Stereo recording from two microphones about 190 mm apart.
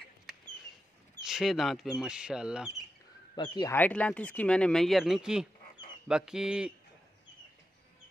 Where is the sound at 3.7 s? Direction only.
10° left (ahead or behind).